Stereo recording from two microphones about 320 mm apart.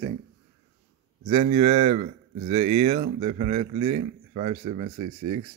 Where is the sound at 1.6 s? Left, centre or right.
Centre.